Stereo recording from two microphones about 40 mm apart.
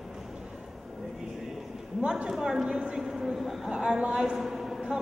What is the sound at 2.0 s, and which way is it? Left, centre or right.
A man's voice, right.